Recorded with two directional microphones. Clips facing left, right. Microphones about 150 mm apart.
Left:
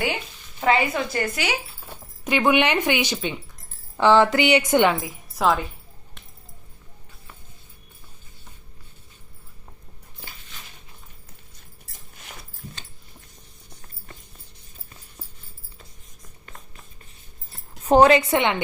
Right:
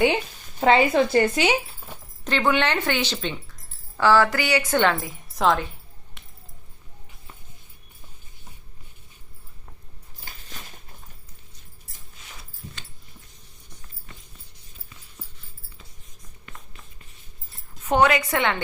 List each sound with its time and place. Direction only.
0.6 s a woman's voice: 25° right (ahead or behind)
2.2 s a woman's voice: 15° left (ahead or behind)
4.9 s a woman's voice: 5° left (ahead or behind)
17.8 s a woman's voice: 35° left (ahead or behind)